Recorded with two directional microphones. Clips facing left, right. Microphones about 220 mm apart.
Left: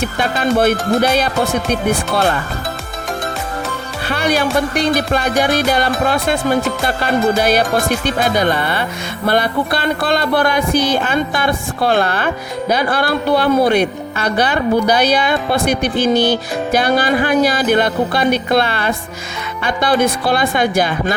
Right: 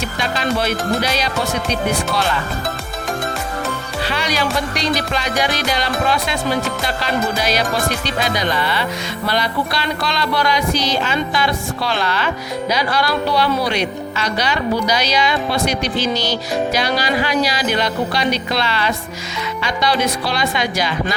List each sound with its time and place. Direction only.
0.0 s music: 55° left (ahead or behind)
4.1 s music: 55° left (ahead or behind)